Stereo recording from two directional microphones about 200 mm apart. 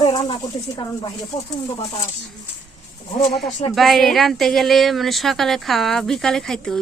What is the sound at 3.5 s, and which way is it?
Speech, 35° left (ahead or behind).